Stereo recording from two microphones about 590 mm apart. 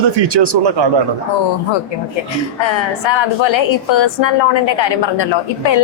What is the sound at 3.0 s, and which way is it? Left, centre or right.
A woman's voice, left.